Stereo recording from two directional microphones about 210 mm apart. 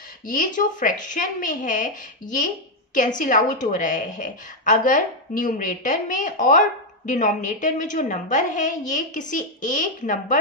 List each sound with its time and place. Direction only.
0.3 s speech: 40° left (ahead or behind)